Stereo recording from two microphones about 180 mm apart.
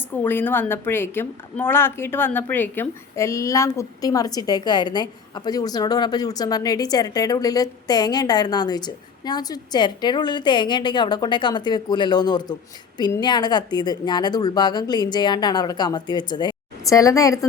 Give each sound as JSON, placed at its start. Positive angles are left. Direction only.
{"t": 0.1, "sound": "a woman's voice", "side_deg": 10}